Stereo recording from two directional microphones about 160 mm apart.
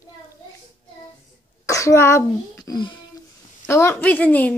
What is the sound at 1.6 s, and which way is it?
Speech, 20° left (ahead or behind).